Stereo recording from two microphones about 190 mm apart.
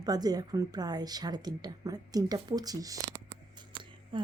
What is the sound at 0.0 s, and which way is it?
A woman's voice, 20° right (ahead or behind).